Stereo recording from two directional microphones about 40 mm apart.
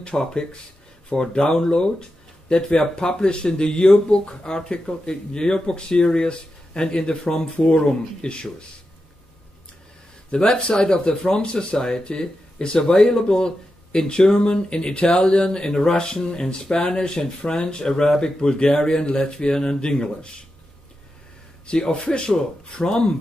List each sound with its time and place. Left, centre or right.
0.0 s speech: left
10.3 s speech: left
21.9 s speech: left